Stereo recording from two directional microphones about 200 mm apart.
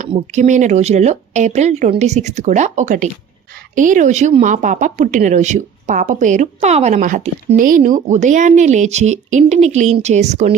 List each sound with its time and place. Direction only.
0.3 s speech: 35° right (ahead or behind)